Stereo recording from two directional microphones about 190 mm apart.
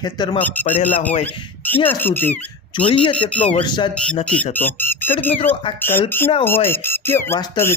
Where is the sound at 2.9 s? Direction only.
25° left (ahead or behind).